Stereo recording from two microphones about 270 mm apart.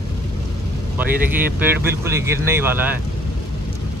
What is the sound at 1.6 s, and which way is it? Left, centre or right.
Speech, centre.